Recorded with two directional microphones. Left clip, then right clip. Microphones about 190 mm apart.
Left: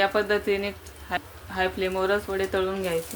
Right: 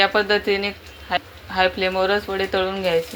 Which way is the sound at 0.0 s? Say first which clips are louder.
Right 5 dB; 5° left (ahead or behind).